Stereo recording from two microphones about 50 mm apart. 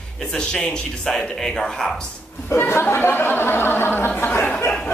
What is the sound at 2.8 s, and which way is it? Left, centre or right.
Speech, left.